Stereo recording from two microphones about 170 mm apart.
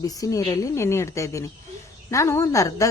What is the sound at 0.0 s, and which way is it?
A woman's voice, 20° left (ahead or behind).